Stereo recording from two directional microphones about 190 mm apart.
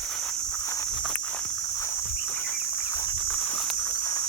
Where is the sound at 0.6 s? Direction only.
15° left (ahead or behind).